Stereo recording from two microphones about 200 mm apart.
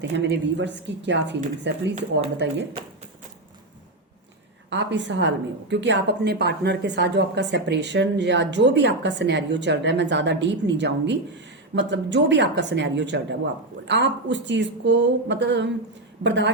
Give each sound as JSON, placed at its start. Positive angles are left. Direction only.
{"t": 0.0, "sound": "a woman's voice", "side_deg": -60}
{"t": 4.7, "sound": "a woman's voice", "side_deg": -65}